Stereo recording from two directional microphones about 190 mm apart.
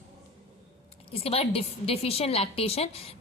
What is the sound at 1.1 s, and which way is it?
A woman's voice, 30° left (ahead or behind).